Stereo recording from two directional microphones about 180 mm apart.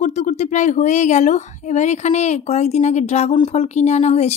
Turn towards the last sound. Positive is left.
turn(degrees=35)  # may be behind; listen again after turning